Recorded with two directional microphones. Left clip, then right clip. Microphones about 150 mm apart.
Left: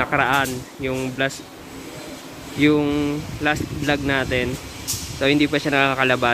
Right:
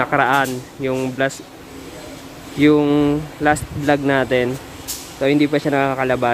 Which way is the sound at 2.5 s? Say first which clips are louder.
Right 4 dB; 25° right (ahead or behind).